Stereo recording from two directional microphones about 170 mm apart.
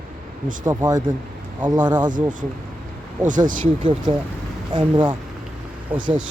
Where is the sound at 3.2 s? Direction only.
50° right (ahead or behind).